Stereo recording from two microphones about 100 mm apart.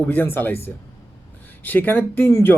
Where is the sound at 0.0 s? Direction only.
20° left (ahead or behind).